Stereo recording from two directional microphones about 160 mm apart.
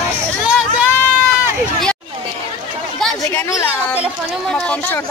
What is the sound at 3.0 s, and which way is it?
Chatter, 5° left (ahead or behind).